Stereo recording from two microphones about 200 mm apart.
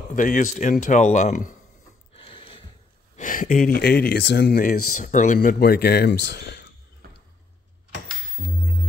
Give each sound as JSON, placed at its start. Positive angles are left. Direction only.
{"t": 0.1, "sound": "speech", "side_deg": 40}
{"t": 2.2, "sound": "a sound", "side_deg": 25}
{"t": 3.2, "sound": "speech", "side_deg": 45}
{"t": 8.4, "sound": "music", "side_deg": -40}